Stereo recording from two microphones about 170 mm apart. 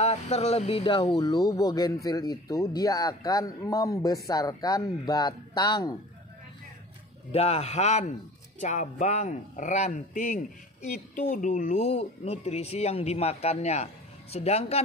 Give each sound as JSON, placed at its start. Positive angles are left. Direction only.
{"t": 0.0, "sound": "speech", "side_deg": 40}
{"t": 7.3, "sound": "a man's voice", "side_deg": 40}